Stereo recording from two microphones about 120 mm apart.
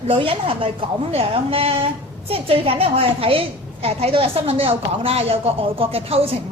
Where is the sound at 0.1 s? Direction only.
50° right (ahead or behind).